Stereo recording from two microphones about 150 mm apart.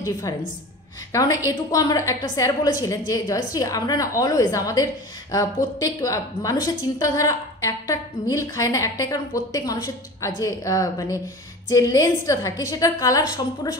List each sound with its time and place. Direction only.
1.4 s a woman's voice: 25° left (ahead or behind)